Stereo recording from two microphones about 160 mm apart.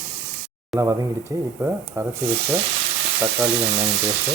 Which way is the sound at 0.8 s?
20° right (ahead or behind).